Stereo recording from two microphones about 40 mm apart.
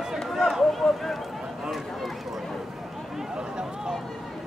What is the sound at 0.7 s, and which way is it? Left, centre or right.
Speech, centre.